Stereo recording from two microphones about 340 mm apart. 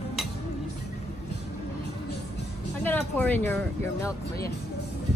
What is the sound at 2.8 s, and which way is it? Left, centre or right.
Speech, centre.